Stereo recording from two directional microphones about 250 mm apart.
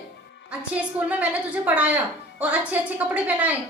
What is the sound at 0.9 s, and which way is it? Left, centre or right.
A woman's voice, centre.